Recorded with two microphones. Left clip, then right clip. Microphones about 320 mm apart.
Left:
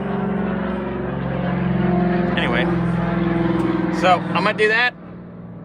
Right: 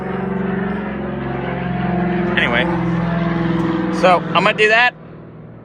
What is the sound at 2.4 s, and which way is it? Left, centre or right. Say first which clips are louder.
Vehicle: right 6 dB; centre.